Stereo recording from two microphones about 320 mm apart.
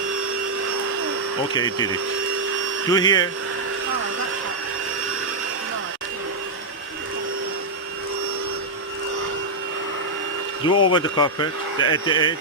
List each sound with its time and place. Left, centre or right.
1.5 s speech: centre
2.9 s speech: centre
10.7 s speech: left
10.9 s speech: centre